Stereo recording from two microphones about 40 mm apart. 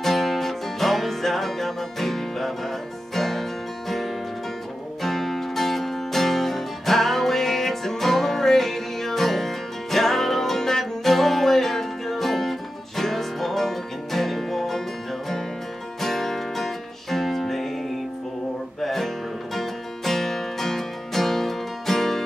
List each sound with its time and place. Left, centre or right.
0.0 s music: centre
5.0 s music: centre
16.0 s music: centre
18.8 s music: centre